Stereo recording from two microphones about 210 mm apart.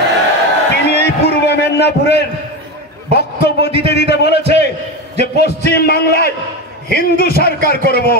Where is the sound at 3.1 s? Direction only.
50° left (ahead or behind).